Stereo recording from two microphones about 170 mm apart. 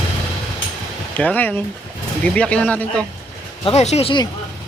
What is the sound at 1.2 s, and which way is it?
Speech, 10° left (ahead or behind).